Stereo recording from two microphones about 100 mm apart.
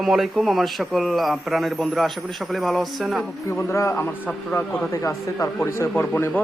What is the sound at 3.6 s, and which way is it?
Speech, 30° left (ahead or behind).